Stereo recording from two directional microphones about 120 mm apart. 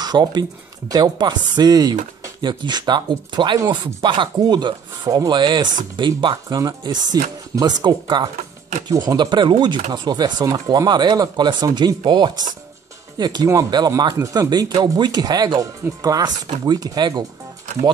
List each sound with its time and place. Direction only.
0.0 s speech: 35° right (ahead or behind)